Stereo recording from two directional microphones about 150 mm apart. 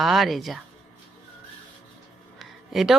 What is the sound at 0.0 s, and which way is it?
Speech, centre (ahead or behind).